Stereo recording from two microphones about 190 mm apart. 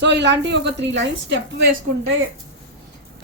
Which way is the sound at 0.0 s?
65° right (ahead or behind).